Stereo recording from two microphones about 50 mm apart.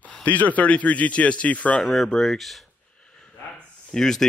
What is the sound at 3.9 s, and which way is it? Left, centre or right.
Speech, centre.